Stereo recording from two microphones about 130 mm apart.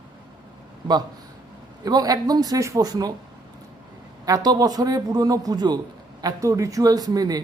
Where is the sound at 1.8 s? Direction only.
30° right (ahead or behind).